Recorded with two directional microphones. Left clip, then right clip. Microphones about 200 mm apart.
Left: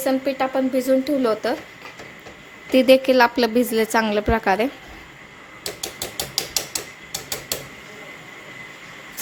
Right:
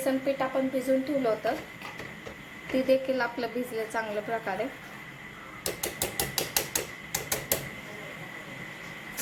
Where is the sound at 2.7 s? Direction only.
55° left (ahead or behind).